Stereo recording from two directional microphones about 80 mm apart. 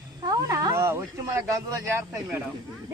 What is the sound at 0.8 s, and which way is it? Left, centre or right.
Speech, right.